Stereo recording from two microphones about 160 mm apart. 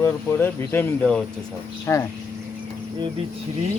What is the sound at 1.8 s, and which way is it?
Speech, 20° left (ahead or behind).